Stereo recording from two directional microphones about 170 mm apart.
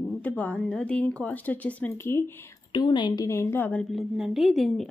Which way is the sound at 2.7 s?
25° left (ahead or behind).